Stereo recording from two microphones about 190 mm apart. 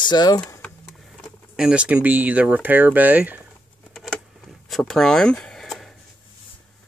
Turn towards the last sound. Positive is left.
turn(degrees=0)  # may be behind; listen again after turning